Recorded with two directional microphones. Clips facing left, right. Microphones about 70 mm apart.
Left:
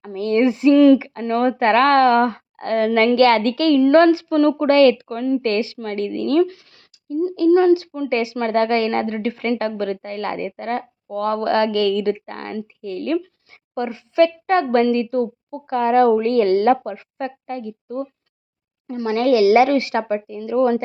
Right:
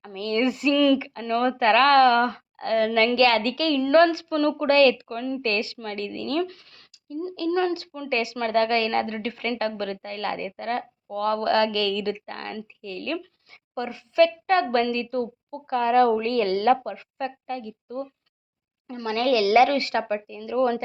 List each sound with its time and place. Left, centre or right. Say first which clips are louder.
0.0 s a woman's voice: left 7 dB; left
6.4 s speech: left 10 dB; centre
7.3 s a woman's voice: left 10 dB; left